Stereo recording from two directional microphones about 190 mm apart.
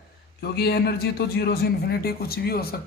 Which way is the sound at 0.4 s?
55° left (ahead or behind).